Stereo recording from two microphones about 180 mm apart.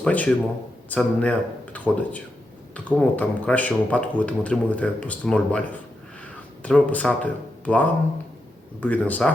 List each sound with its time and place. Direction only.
0.0 s a man's voice: 10° left (ahead or behind)